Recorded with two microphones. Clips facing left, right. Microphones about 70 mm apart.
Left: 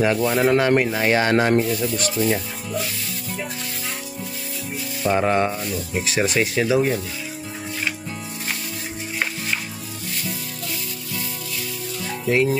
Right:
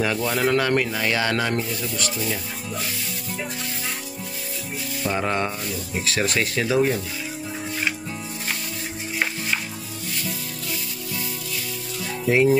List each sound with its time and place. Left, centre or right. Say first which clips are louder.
0.0 s speech: left 4 dB; centre; by 1.7 s left
5.0 s speech: left 5 dB; centre
12.3 s frying: right 2 dB; centre